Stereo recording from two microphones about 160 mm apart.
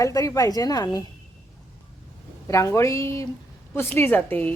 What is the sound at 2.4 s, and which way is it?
Speech, 20° left (ahead or behind).